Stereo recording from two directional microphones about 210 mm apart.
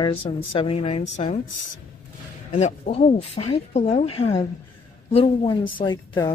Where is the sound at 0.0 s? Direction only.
25° left (ahead or behind).